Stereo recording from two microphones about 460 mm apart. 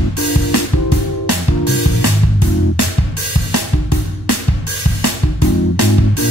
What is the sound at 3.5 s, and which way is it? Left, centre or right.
Music, left.